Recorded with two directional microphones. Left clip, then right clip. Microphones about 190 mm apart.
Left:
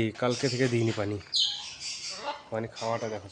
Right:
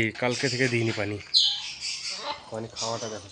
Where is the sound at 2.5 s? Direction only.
20° left (ahead or behind).